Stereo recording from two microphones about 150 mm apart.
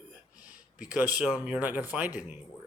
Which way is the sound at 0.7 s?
10° right (ahead or behind).